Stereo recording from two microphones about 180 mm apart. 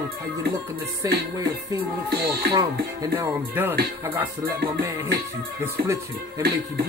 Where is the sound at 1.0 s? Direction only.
20° right (ahead or behind).